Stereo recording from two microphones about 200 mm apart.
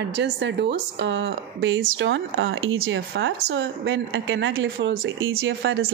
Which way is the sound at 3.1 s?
55° right (ahead or behind).